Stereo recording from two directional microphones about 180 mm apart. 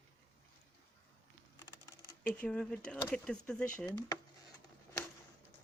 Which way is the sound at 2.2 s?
5° left (ahead or behind).